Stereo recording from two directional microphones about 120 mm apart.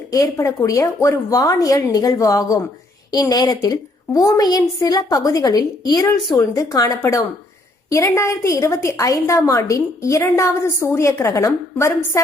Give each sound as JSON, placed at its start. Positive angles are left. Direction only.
{"t": 0.1, "sound": "a woman's voice", "side_deg": 25}